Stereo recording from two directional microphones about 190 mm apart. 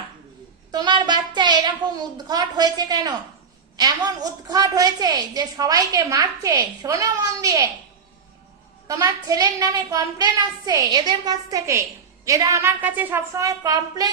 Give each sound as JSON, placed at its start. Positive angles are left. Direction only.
{"t": 0.7, "sound": "a woman's voice", "side_deg": -20}
{"t": 8.9, "sound": "a woman's voice", "side_deg": -20}